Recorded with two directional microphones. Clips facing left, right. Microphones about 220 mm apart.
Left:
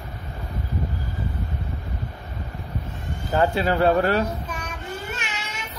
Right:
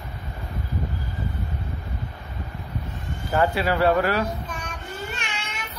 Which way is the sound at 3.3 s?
25° left (ahead or behind).